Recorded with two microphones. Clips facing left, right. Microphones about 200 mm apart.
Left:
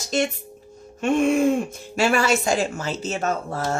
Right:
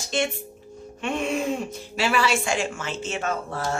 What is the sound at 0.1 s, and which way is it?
Speech, 40° left (ahead or behind).